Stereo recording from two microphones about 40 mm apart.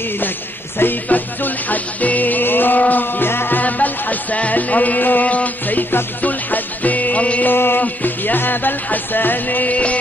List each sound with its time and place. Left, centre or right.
1.0 s music: left
7.4 s music: left
7.8 s music: left